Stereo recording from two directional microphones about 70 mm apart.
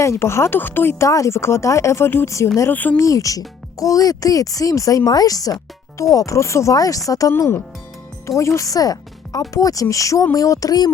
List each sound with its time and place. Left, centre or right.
0.0 s speech: left
0.6 s a woman's voice: left
1.0 s speech: left
2.6 s a woman's voice: left
3.0 s speech: left
6.7 s speech: left